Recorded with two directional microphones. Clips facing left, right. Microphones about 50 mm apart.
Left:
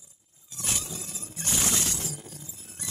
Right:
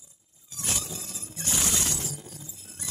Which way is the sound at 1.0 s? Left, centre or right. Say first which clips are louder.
Even; left.